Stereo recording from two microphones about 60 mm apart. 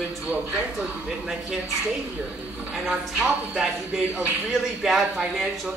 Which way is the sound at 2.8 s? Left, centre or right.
Centre.